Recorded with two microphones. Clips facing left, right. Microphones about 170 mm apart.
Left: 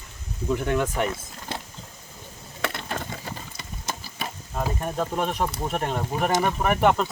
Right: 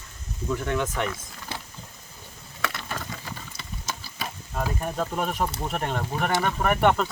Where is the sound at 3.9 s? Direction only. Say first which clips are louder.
Left 2 dB; 50° left (ahead or behind).